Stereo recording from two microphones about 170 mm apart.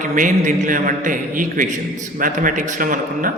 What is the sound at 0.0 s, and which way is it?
A man's voice, 50° right (ahead or behind).